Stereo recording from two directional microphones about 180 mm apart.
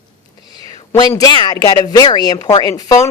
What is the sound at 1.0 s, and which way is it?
Speech, 20° left (ahead or behind).